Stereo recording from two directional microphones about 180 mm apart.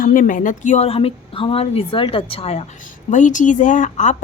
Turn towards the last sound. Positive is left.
turn(degrees=45)  # may be behind; listen again after turning